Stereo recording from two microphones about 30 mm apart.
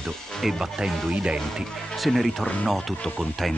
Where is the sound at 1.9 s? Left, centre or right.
Centre.